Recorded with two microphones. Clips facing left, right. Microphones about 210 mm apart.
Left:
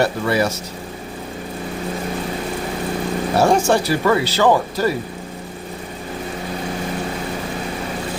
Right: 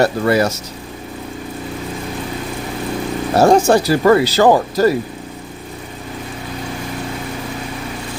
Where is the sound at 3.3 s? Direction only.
40° right (ahead or behind).